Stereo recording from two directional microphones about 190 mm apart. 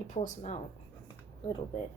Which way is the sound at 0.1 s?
40° left (ahead or behind).